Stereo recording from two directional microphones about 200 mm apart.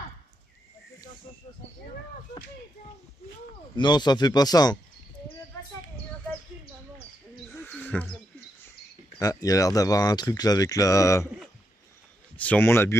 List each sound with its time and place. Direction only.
3.7 s speech: 20° left (ahead or behind)
7.6 s owl: 10° left (ahead or behind)
9.2 s speech: 15° left (ahead or behind)
12.4 s speech: 10° left (ahead or behind)